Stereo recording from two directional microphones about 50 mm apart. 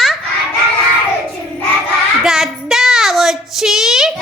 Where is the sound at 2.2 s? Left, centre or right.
Centre.